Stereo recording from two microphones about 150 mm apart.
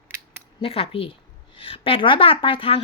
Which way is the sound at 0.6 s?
40° left (ahead or behind).